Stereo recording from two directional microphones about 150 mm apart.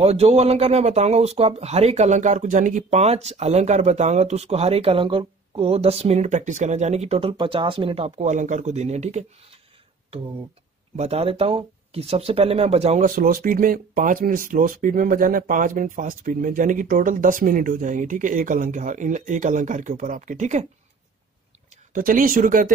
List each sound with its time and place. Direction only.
0.0 s speech: 45° right (ahead or behind)
11.0 s speech: 40° right (ahead or behind)
13.0 s speech: 65° right (ahead or behind)
21.9 s speech: 65° right (ahead or behind)